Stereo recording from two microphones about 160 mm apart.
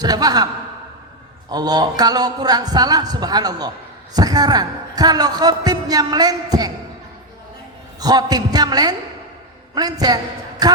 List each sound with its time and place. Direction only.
0.0 s speech: 25° right (ahead or behind)
1.5 s speech: 25° right (ahead or behind)
7.9 s a man's voice: 25° right (ahead or behind)